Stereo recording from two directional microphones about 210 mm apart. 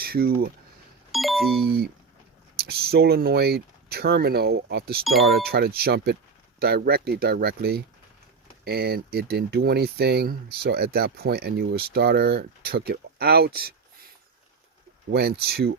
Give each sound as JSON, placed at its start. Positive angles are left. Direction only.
{"t": 0.0, "sound": "speech", "side_deg": -45}
{"t": 1.1, "sound": "a sound", "side_deg": 0}
{"t": 1.6, "sound": "speech", "side_deg": -45}
{"t": 15.1, "sound": "speech", "side_deg": -50}